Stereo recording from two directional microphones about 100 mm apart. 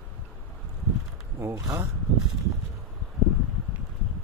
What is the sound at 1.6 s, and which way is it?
Speech, 30° right (ahead or behind).